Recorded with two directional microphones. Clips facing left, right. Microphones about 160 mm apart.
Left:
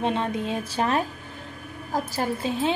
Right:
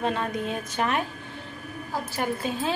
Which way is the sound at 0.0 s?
25° left (ahead or behind).